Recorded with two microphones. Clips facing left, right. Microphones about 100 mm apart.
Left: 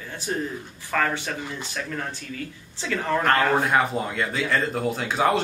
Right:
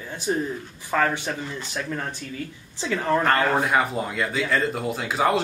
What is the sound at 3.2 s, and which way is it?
A man's voice, centre (ahead or behind).